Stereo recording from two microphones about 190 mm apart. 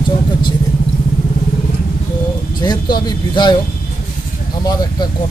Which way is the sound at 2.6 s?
20° left (ahead or behind).